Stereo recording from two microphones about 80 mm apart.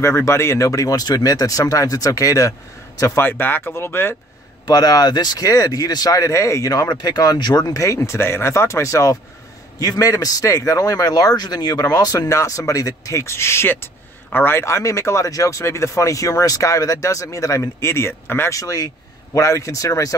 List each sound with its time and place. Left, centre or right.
0.0 s speech: left
3.2 s speech: left
4.6 s speech: left
6.3 s speech: left
6.7 s speech: left
18.5 s speech: left